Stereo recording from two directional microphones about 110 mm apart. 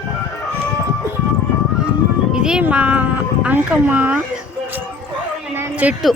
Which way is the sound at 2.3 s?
5° right (ahead or behind).